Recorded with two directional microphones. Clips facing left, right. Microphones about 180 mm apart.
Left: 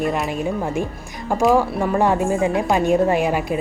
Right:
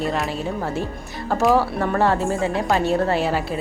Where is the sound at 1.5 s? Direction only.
15° left (ahead or behind).